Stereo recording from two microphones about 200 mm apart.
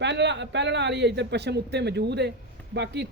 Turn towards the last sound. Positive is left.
turn(degrees=-60)  # may be behind; listen again after turning